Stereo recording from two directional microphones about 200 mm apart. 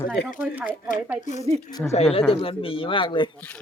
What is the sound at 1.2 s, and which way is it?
Speech, 35° left (ahead or behind).